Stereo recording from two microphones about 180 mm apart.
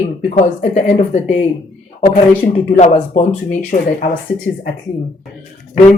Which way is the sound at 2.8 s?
45° left (ahead or behind).